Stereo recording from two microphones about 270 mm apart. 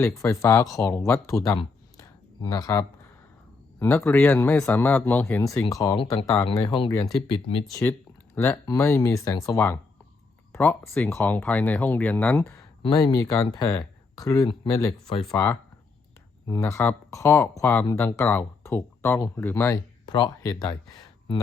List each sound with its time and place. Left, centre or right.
0.0 s speech: centre
1.5 s a sound: centre
3.8 s speech: centre